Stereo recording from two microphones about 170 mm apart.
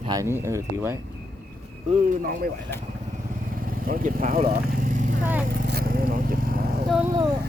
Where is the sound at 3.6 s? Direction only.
55° right (ahead or behind).